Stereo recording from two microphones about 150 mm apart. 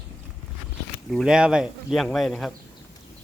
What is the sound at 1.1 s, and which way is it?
Speech, centre (ahead or behind).